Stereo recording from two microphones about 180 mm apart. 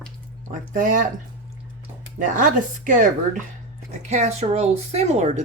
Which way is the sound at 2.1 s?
45° right (ahead or behind).